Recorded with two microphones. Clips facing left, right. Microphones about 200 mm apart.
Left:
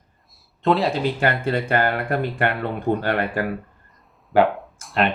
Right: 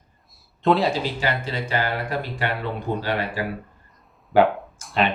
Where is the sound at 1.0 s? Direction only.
55° left (ahead or behind).